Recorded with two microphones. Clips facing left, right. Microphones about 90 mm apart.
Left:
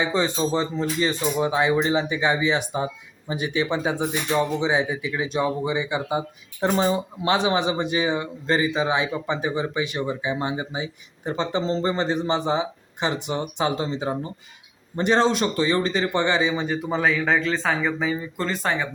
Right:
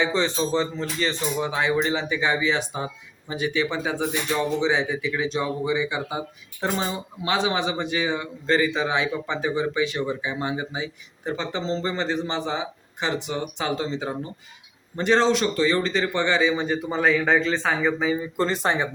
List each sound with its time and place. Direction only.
0.0 s a man's voice: 10° left (ahead or behind)
11.6 s a man's voice: 35° left (ahead or behind)
12.0 s a man's voice: 20° left (ahead or behind)
16.6 s speech: centre (ahead or behind)
18.3 s speech: 25° right (ahead or behind)